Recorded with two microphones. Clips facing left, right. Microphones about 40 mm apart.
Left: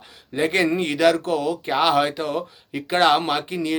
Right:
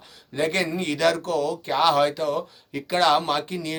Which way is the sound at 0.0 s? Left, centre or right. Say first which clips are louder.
Left 2 dB; left.